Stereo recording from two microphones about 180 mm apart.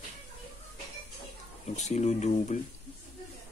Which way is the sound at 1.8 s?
40° left (ahead or behind).